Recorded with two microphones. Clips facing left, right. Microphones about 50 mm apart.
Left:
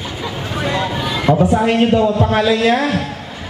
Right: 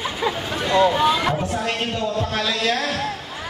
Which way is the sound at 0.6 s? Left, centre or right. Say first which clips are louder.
Right 1 dB; centre.